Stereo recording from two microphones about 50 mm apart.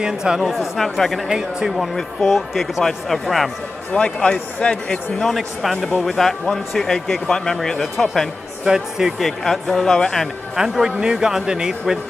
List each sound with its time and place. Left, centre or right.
0.0 s a man's voice: centre
0.4 s speech: centre
3.9 s speech: centre
5.2 s speech: centre
8.6 s a man's voice: centre
9.2 s speech: centre
10.5 s a man's voice: centre